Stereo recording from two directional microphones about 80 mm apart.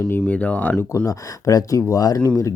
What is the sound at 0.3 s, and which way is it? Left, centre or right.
Speech, centre.